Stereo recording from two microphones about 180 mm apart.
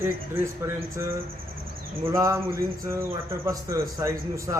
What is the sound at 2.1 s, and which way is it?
Speech, 15° right (ahead or behind).